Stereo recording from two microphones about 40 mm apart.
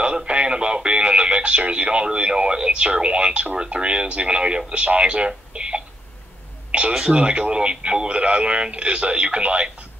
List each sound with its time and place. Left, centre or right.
0.0 s speech: right
7.0 s speech: right